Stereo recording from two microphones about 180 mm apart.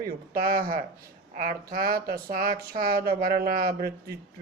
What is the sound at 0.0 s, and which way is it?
Speech, 55° right (ahead or behind).